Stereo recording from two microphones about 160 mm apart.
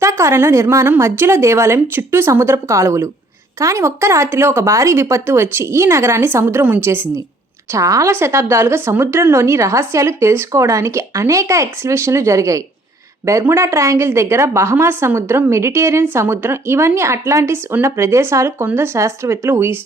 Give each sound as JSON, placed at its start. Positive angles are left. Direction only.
{"t": 0.0, "sound": "a woman's voice", "side_deg": -15}